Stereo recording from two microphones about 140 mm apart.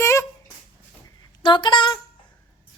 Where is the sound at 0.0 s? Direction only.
20° left (ahead or behind).